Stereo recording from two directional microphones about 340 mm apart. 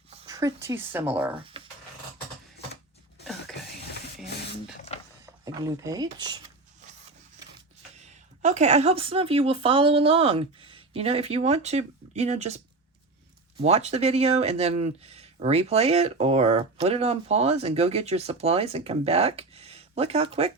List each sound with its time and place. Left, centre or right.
0.3 s speech: centre
1.4 s a sound: centre
3.9 s rub: left
5.2 s speech: centre
8.0 s speech: right